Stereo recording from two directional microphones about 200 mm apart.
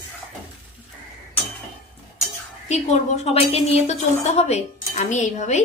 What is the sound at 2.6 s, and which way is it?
A woman's voice, 35° left (ahead or behind).